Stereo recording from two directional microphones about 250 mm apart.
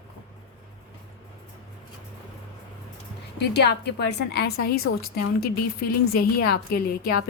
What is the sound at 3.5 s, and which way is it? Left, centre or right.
A woman's voice, left.